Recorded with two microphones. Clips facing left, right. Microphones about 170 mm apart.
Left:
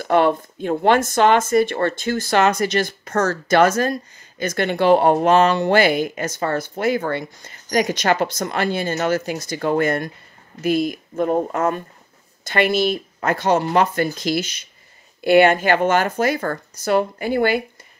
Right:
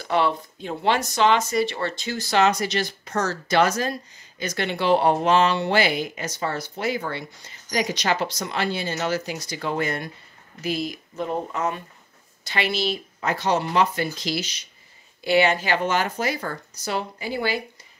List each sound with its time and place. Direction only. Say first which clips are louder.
0.0 s speech: left 6 dB; 50° left (ahead or behind)